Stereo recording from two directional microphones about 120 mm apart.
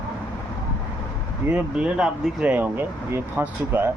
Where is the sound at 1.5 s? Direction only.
10° right (ahead or behind).